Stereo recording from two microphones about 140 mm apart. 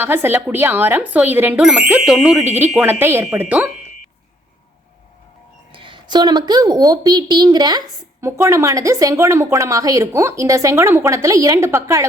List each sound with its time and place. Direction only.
0.0 s speech: 15° right (ahead or behind)
5.7 s a woman's voice: 35° right (ahead or behind); by 12.0 s 20° right (ahead or behind)